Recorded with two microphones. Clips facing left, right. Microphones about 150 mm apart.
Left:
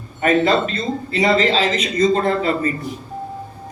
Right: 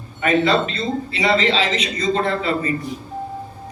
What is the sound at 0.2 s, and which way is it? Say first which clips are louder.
A man's voice: left 1 dB; 45° left (ahead or behind).